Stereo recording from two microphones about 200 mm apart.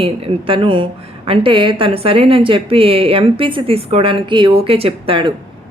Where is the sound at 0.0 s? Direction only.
25° right (ahead or behind).